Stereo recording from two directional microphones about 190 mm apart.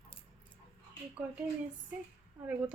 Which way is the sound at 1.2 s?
5° right (ahead or behind).